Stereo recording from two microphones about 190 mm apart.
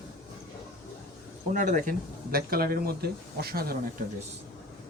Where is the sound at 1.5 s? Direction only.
40° right (ahead or behind).